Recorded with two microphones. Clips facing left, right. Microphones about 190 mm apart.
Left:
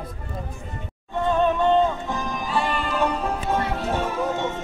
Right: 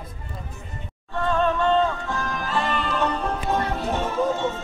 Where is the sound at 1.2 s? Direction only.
15° left (ahead or behind).